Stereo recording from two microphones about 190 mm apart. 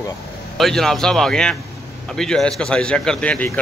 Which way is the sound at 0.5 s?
Centre (ahead or behind).